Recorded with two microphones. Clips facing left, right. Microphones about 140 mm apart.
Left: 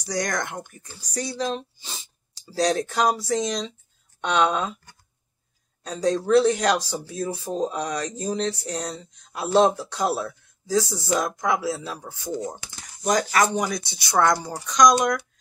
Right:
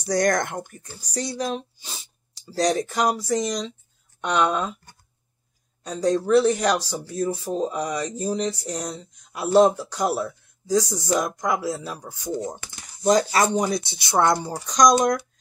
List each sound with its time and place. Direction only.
0.0 s speech: 50° right (ahead or behind)
0.7 s speech: 40° right (ahead or behind)
1.4 s speech: 5° right (ahead or behind)
2.5 s a sound: 10° right (ahead or behind)
4.2 s speech: 5° right (ahead or behind)
5.9 s speech: 5° right (ahead or behind)
6.8 s speech: 10° left (ahead or behind)
7.4 s a sound: 5° right (ahead or behind)
10.7 s speech: 5° left (ahead or behind)
11.1 s a sound: 15° right (ahead or behind)
13.0 s speech: 30° right (ahead or behind)